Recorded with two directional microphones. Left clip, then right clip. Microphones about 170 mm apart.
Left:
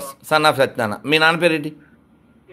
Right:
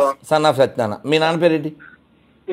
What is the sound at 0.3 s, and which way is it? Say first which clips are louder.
A man's voice: left 3 dB; 20° right (ahead or behind).